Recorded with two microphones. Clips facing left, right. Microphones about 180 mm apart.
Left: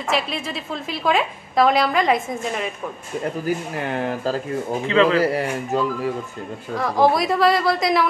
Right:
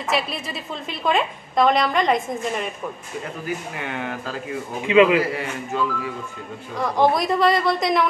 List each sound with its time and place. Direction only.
0.1 s a woman's voice: centre (ahead or behind)
3.8 s speech: 35° left (ahead or behind)
4.8 s a man's voice: 15° right (ahead or behind)
5.3 s speech: 40° left (ahead or behind)
6.8 s a woman's voice: centre (ahead or behind)